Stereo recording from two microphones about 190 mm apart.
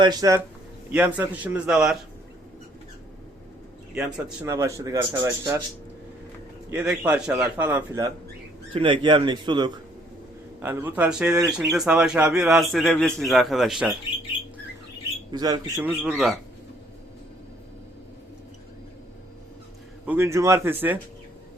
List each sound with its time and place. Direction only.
0.0 s speech: 20° right (ahead or behind); by 2.0 s 5° right (ahead or behind)
4.4 s speech: 15° right (ahead or behind)
6.7 s speech: 10° right (ahead or behind)
8.7 s speech: 25° right (ahead or behind)
10.6 s a man's voice: 10° right (ahead or behind)
15.3 s speech: 20° right (ahead or behind)
15.8 s a man's voice: 5° right (ahead or behind)
20.1 s speech: 15° right (ahead or behind)